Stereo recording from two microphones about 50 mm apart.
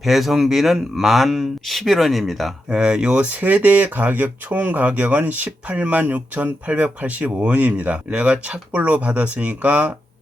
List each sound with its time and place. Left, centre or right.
0.0 s speech: centre
2.6 s speech: centre
3.4 s speech: right